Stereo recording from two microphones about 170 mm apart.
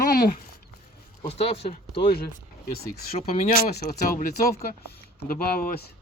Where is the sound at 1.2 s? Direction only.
35° left (ahead or behind).